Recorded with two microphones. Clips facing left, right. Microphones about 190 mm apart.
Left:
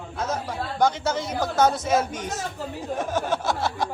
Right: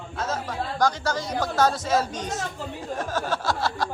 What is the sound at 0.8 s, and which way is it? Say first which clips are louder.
Speech: left 2 dB; 20° left (ahead or behind).